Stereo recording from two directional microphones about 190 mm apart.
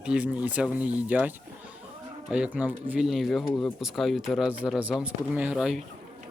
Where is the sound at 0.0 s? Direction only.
5° right (ahead or behind).